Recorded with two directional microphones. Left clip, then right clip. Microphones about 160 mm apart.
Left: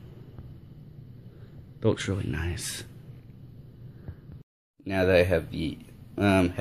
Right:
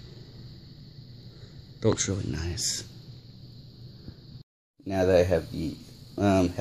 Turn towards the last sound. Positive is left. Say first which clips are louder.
# even
turn(degrees=-10)  # may be behind; listen again after turning